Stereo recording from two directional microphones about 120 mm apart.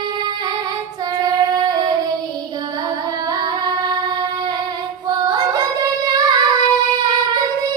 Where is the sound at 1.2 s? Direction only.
35° right (ahead or behind).